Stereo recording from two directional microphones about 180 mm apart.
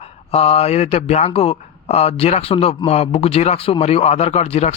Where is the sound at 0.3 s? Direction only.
35° left (ahead or behind).